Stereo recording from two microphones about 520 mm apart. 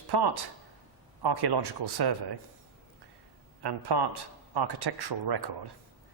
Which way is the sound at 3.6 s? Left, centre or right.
Right.